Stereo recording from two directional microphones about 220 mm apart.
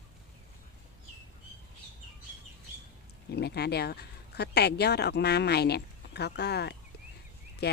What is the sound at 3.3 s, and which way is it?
Speech, 50° left (ahead or behind).